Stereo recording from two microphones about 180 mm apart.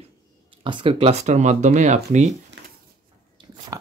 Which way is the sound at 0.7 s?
30° right (ahead or behind).